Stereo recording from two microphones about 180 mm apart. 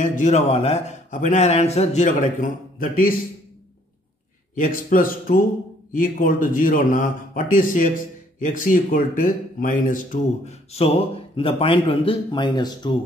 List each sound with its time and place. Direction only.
0.0 s speech: 45° left (ahead or behind)
4.6 s a man's voice: 50° left (ahead or behind); by 12.9 s 25° left (ahead or behind)